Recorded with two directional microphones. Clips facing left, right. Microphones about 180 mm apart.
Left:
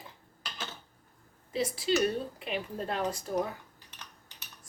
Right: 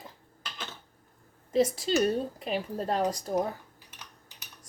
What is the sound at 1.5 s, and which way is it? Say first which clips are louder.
Speech: right 4 dB; 45° right (ahead or behind).